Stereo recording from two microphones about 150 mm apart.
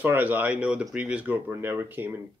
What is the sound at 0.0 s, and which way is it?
Speech, 10° right (ahead or behind).